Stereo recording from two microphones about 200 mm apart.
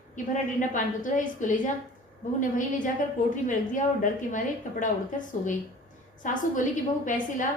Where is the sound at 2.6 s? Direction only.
40° left (ahead or behind).